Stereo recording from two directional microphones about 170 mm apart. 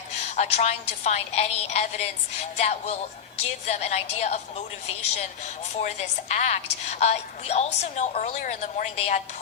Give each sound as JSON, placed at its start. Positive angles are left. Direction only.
{"t": 0.3, "sound": "a woman's voice", "side_deg": 40}